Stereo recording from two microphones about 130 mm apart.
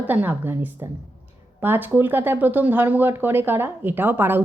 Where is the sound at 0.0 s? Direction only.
15° right (ahead or behind).